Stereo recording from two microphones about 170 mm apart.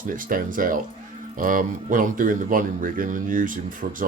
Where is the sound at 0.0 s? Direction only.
55° right (ahead or behind).